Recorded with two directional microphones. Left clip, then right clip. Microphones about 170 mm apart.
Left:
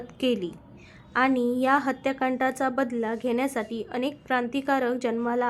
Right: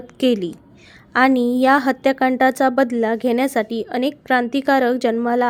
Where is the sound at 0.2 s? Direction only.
35° right (ahead or behind).